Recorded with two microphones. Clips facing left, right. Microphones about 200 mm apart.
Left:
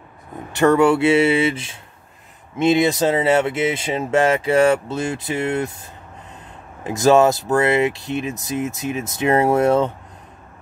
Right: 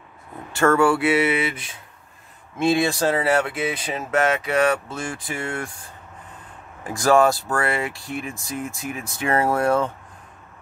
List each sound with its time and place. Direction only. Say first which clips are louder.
0.5 s speech: left 3 dB; 20° left (ahead or behind)
6.9 s speech: left 3 dB; 20° left (ahead or behind)